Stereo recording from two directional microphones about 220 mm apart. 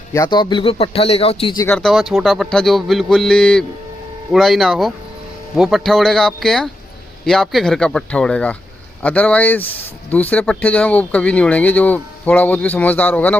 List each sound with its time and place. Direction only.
0.1 s a man's voice: 15° left (ahead or behind)
1.6 s speech: 5° left (ahead or behind)